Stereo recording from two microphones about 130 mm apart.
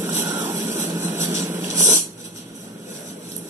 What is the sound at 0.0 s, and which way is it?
Vehicle, 15° right (ahead or behind).